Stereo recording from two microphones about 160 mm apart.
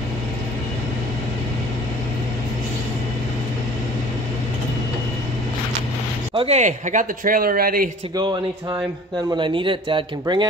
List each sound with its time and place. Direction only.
6.3 s speech: 40° right (ahead or behind); by 7.9 s 65° right (ahead or behind)
9.4 s speech: 30° right (ahead or behind)